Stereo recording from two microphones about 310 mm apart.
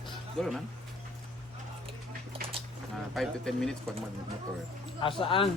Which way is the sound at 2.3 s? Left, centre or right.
Centre.